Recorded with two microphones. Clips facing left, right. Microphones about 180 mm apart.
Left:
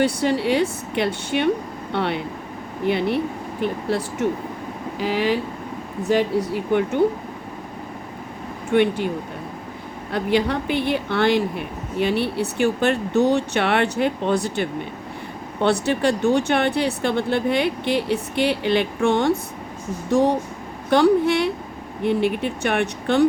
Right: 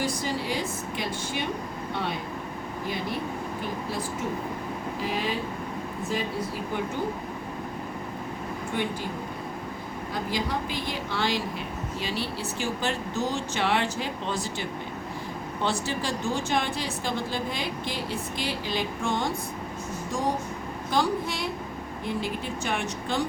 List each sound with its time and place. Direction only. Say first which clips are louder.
0.0 s speech: left 9 dB; 70° left (ahead or behind)
8.7 s speech: left 13 dB; 70° left (ahead or behind)
10.1 s a woman's voice: left 9 dB; 70° left (ahead or behind)
20.9 s a woman's voice: left 11 dB; 65° left (ahead or behind)